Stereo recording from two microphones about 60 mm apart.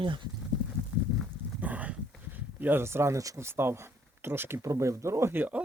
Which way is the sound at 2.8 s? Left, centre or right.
Right.